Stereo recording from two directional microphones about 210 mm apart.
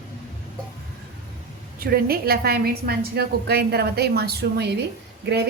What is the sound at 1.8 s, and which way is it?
A woman's voice, 45° right (ahead or behind).